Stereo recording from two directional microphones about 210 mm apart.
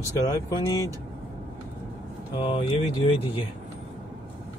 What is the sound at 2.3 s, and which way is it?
Speech, 25° left (ahead or behind).